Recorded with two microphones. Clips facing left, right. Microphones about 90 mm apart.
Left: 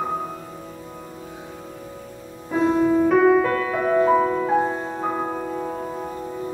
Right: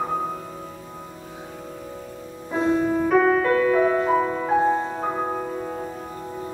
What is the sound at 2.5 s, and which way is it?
Music, centre (ahead or behind).